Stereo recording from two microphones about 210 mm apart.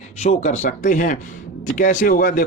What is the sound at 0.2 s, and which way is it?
A man's voice, 35° left (ahead or behind).